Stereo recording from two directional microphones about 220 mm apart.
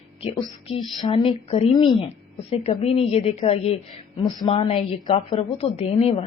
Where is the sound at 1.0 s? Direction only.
25° left (ahead or behind).